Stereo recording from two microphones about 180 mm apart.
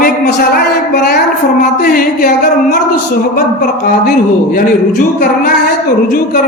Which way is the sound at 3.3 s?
60° left (ahead or behind).